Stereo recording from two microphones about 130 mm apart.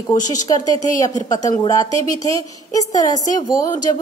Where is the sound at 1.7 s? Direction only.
25° left (ahead or behind).